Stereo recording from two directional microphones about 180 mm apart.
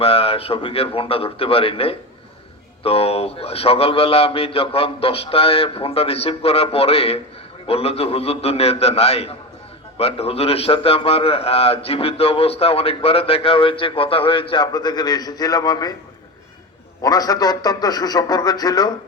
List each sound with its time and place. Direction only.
0.0 s a man's voice: 30° left (ahead or behind)
17.0 s speech: 20° left (ahead or behind)